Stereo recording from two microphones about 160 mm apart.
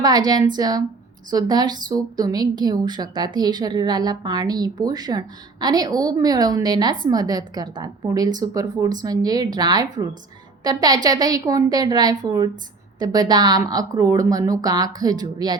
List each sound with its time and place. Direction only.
0.0 s a woman's voice: 25° right (ahead or behind)